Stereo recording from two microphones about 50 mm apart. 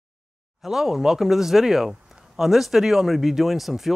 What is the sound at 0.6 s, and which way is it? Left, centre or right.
Speech, centre.